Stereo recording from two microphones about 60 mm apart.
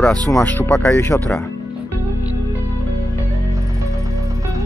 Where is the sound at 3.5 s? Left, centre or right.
Right.